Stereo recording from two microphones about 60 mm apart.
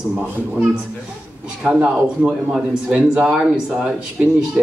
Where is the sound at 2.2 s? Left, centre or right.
Centre.